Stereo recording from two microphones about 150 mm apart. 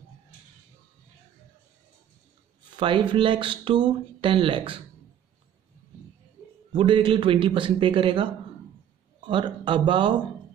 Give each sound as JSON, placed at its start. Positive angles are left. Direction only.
{"t": 2.7, "sound": "speech", "side_deg": -35}
{"t": 6.7, "sound": "speech", "side_deg": -30}
{"t": 9.3, "sound": "speech", "side_deg": -35}